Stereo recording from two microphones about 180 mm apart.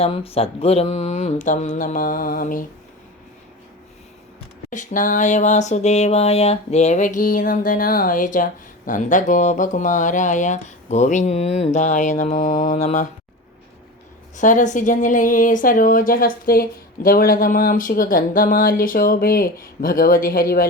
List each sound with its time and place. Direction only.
0.0 s a sound: 30° left (ahead or behind); by 2.6 s 50° left (ahead or behind)
4.7 s speech: 45° left (ahead or behind)
14.3 s speech: 45° left (ahead or behind)